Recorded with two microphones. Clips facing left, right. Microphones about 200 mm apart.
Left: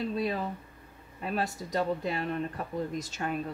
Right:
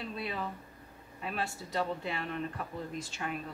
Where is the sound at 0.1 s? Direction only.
35° left (ahead or behind).